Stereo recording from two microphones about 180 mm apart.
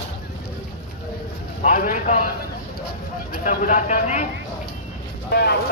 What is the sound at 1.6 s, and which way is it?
Speech, 45° left (ahead or behind).